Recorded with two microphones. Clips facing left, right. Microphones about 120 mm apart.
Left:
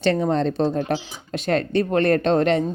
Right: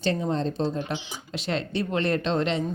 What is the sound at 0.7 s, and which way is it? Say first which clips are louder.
Speech: left 7 dB; 45° left (ahead or behind).